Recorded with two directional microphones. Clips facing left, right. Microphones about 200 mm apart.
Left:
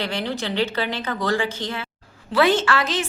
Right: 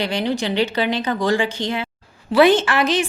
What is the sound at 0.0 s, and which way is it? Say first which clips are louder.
A woman's voice: right 5 dB; 15° right (ahead or behind).